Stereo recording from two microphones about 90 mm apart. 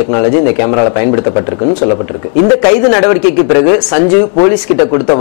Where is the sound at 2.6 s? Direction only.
15° left (ahead or behind).